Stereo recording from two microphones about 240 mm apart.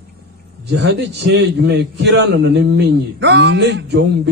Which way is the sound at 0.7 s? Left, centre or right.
Right.